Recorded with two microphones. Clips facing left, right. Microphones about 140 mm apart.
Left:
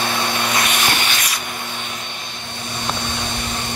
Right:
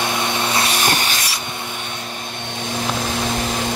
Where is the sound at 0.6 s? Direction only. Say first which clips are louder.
Right 1 dB; 35° right (ahead or behind).